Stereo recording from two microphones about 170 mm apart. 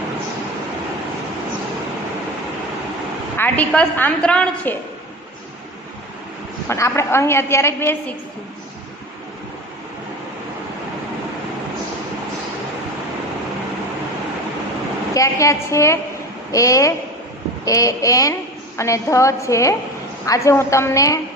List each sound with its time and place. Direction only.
3.3 s a woman's voice: 10° left (ahead or behind)
6.7 s a woman's voice: 15° left (ahead or behind)
15.1 s a woman's voice: 20° left (ahead or behind)